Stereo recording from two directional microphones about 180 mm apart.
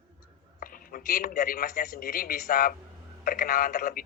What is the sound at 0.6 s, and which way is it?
A man's voice, 50° left (ahead or behind).